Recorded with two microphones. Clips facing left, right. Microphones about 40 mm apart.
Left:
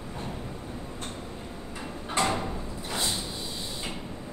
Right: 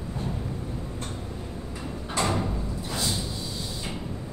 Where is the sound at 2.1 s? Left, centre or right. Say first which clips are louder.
Even; left.